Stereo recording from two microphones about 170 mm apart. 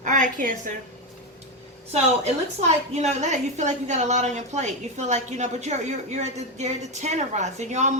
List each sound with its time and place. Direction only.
0.0 s a woman's voice: 50° right (ahead or behind)
1.9 s a woman's voice: 40° right (ahead or behind)